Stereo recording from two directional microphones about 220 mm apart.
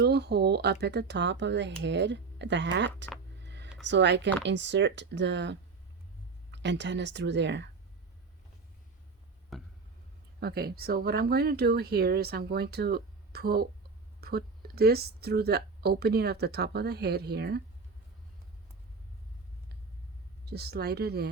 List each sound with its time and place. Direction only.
0.0 s speech: 50° right (ahead or behind)
3.4 s a sound: 50° right (ahead or behind)
4.4 s speech: 55° right (ahead or behind)
9.5 s a sound: centre (ahead or behind)
10.4 s speech: 45° right (ahead or behind)
20.4 s speech: 45° right (ahead or behind)